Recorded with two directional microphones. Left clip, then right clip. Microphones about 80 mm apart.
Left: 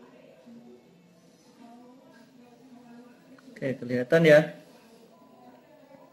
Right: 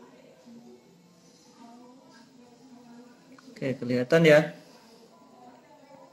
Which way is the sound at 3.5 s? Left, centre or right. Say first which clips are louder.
Right 1 dB; centre.